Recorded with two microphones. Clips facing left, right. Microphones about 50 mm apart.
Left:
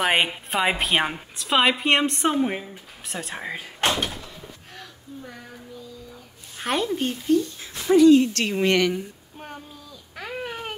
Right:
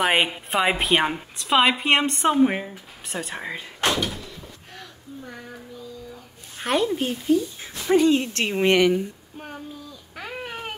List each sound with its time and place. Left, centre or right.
0.0 s a woman's voice: centre
2.4 s speech: right
3.1 s a woman's voice: centre
3.8 s door: left
4.7 s a sound: centre
6.6 s a woman's voice: centre
7.9 s speech: right; by 9.0 s centre
10.1 s baby cry: centre